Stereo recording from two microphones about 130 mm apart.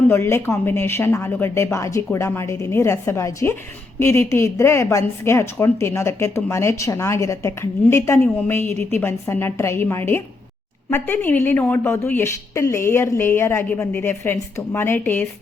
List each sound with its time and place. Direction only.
0.1 s a woman's voice: 20° left (ahead or behind)